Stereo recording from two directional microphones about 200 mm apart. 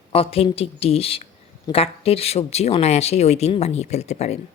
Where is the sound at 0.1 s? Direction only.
30° left (ahead or behind).